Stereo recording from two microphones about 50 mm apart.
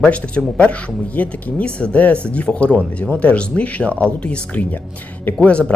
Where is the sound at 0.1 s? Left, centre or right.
Left.